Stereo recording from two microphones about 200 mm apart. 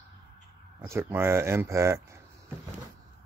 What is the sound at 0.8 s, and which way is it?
Speech, 10° right (ahead or behind).